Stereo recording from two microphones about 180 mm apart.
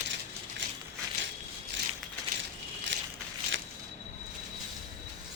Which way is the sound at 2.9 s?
80° right.